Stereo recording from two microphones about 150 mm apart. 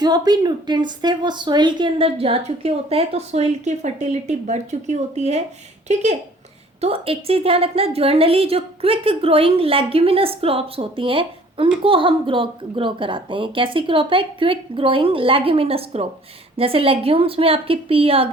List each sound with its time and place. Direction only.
0.0 s a woman's voice: 25° right (ahead or behind)